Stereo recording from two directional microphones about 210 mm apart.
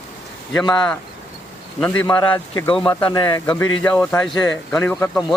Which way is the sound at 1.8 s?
10° left (ahead or behind).